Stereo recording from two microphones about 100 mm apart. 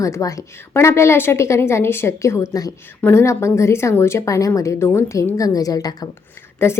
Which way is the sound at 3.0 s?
25° left (ahead or behind).